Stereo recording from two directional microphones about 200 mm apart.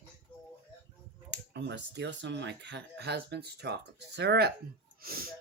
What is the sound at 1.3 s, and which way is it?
Speech, 60° right (ahead or behind).